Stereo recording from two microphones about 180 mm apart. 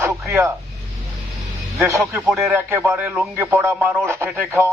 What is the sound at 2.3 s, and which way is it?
Speech, 15° right (ahead or behind).